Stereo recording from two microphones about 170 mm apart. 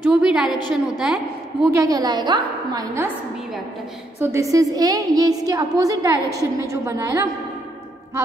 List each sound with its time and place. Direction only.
0.0 s a woman's voice: 5° right (ahead or behind)
1.7 s a woman's voice: 20° right (ahead or behind)
4.2 s a woman's voice: 15° right (ahead or behind)